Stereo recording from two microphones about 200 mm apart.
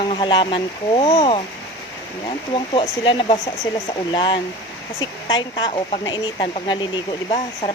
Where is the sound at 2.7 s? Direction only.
25° left (ahead or behind).